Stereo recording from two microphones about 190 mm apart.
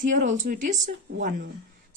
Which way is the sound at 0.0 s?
45° right (ahead or behind).